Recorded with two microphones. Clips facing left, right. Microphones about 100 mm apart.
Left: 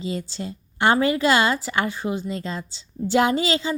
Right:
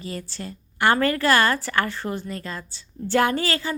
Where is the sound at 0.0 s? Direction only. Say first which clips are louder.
Left 4 dB; 20° left (ahead or behind).